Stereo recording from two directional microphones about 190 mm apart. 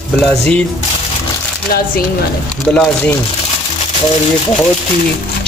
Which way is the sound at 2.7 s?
5° left (ahead or behind).